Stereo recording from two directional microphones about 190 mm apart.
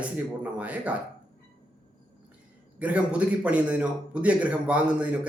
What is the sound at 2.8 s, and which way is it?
A man's voice, 5° right (ahead or behind).